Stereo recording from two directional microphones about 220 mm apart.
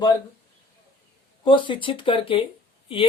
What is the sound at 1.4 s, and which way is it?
Speech, 20° left (ahead or behind).